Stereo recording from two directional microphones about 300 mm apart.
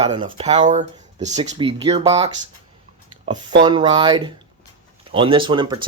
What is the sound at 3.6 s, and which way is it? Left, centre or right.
Speech, centre.